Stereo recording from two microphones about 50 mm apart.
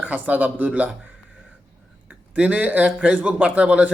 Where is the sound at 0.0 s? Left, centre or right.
Right.